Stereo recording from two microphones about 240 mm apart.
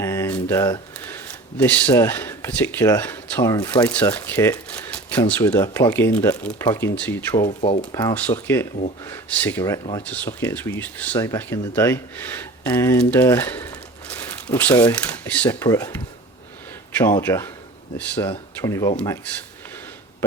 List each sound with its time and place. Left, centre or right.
0.0 s speech: centre
7.4 s speech: left
7.9 s speech: centre
17.0 s speech: centre